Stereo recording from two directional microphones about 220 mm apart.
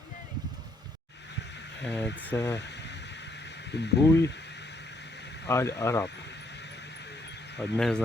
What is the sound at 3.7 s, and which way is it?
Speech, 50° left (ahead or behind).